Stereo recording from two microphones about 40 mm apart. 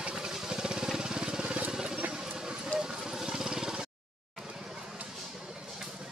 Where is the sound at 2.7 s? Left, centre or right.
Left.